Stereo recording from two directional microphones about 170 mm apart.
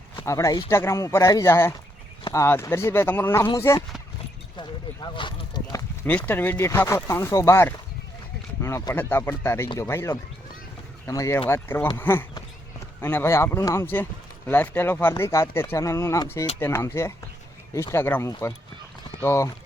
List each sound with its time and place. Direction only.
0.3 s speech: 20° left (ahead or behind)
4.5 s a sound: 25° left (ahead or behind)
6.1 s speech: 10° left (ahead or behind)